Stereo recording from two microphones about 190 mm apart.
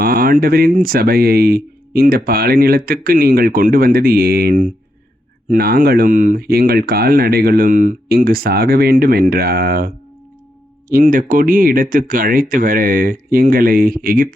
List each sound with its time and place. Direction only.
0.0 s speech: 50° right (ahead or behind)